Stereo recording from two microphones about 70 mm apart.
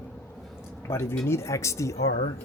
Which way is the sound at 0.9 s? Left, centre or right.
Left.